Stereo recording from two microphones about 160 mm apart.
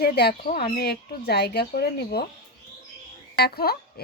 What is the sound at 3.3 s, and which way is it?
Speech, 80° left.